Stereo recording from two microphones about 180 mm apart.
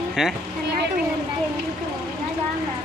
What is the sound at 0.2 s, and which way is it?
Speech, 5° right (ahead or behind).